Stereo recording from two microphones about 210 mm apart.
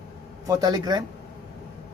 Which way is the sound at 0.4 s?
15° right (ahead or behind).